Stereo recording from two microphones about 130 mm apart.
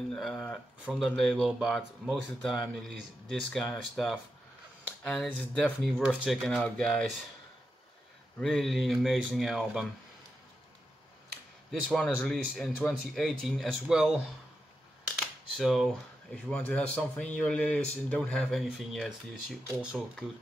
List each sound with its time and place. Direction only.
0.1 s speech: centre (ahead or behind)
8.4 s speech: centre (ahead or behind)
11.9 s speech: 5° left (ahead or behind)
15.5 s speech: centre (ahead or behind)